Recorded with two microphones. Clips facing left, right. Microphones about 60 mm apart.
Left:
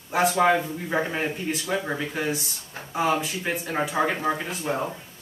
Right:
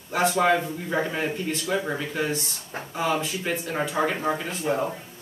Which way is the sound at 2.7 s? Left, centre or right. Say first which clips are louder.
Right 5 dB; right.